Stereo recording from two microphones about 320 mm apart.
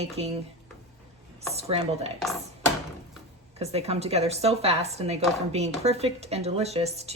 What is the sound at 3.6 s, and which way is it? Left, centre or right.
Speech, centre.